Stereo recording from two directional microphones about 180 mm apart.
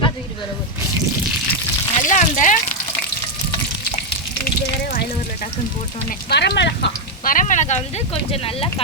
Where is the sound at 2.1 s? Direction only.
45° left (ahead or behind).